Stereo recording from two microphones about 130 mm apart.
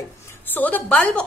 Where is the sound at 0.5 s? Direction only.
15° left (ahead or behind).